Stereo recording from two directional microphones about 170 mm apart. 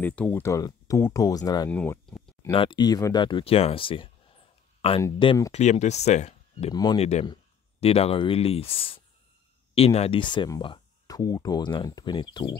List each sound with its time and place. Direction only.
0.0 s speech: 10° left (ahead or behind)
1.7 s speech: 10° left (ahead or behind)
2.5 s speech: 30° left (ahead or behind)
6.7 s speech: 25° left (ahead or behind)
7.0 s speech: 40° left (ahead or behind)